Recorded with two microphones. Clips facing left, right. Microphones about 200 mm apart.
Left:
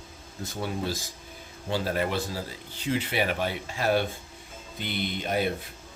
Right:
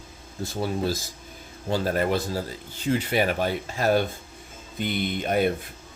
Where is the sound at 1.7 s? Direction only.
45° right (ahead or behind).